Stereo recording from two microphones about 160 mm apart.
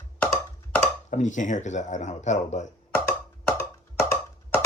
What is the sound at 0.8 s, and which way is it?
Speech, 50° left (ahead or behind).